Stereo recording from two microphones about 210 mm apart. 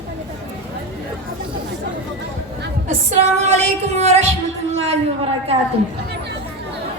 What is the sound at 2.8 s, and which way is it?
A woman's voice, 35° right (ahead or behind).